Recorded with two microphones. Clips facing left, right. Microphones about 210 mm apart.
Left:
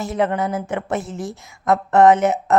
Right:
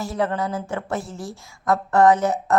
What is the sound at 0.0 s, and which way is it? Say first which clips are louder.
Speech: left 3 dB; 20° left (ahead or behind).